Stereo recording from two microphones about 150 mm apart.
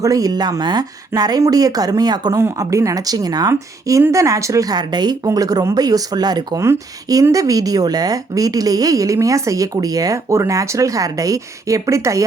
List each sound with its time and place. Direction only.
0.0 s speech: 25° right (ahead or behind)